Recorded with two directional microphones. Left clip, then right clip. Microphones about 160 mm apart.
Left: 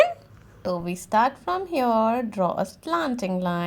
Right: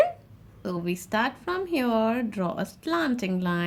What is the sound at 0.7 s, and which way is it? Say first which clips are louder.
Speech: left 5 dB; 15° left (ahead or behind).